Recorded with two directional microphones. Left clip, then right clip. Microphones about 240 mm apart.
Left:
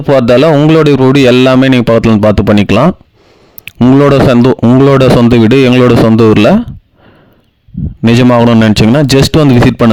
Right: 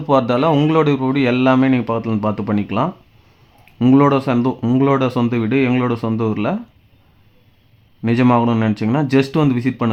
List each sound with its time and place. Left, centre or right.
0.1 s speech: left
8.0 s speech: left